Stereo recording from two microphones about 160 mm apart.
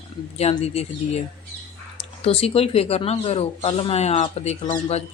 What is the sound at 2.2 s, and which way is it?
Speech, 40° left (ahead or behind).